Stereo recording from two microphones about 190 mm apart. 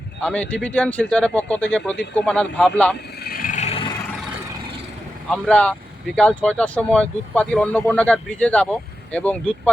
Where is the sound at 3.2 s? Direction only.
50° left (ahead or behind); by 3.9 s 35° left (ahead or behind).